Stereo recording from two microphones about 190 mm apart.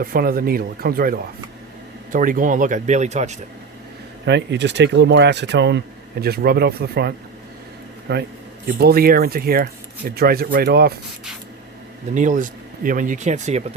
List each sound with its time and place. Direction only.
0.0 s speech: 50° right (ahead or behind)
4.3 s speech: 65° right (ahead or behind)
8.1 s speech: 60° right (ahead or behind)
12.1 s speech: 40° right (ahead or behind)